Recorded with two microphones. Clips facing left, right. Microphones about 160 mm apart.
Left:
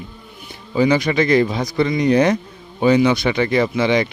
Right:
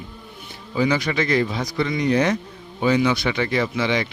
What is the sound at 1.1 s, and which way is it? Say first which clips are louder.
Speech: left 5 dB; 35° left (ahead or behind).